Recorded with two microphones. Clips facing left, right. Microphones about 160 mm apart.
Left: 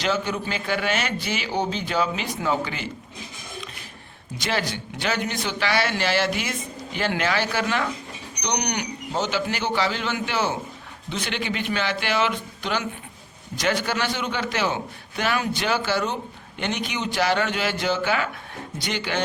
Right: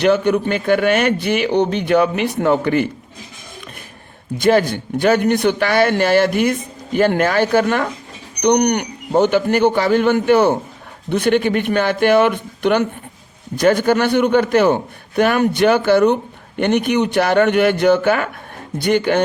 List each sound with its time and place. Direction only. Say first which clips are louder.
0.0 s a man's voice: right 11 dB; 60° right (ahead or behind)
4.4 s a man's voice: right 13 dB; 50° right (ahead or behind)